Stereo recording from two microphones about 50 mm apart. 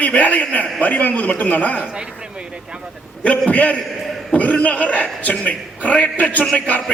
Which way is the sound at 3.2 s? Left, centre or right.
Left.